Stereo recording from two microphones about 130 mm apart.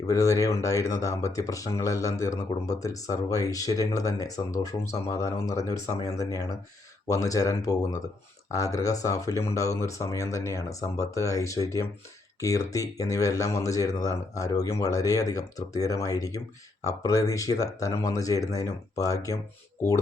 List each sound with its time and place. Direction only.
0.1 s speech: 25° left (ahead or behind)